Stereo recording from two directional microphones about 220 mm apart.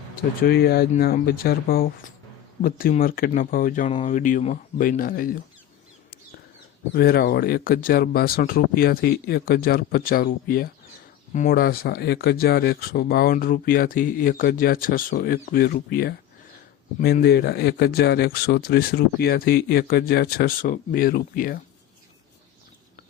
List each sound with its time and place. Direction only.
0.4 s speech: 45° left (ahead or behind)
6.9 s speech: 45° left (ahead or behind)